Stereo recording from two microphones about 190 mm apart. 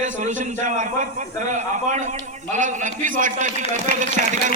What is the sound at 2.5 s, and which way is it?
A man's voice, 45° right (ahead or behind).